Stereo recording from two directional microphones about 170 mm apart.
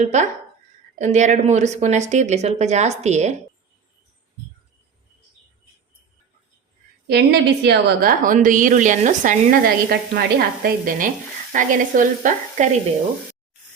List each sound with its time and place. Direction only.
0.0 s a woman's voice: 45° right (ahead or behind)
7.1 s a woman's voice: 75° right (ahead or behind)
8.2 s a woman's voice: 50° right (ahead or behind)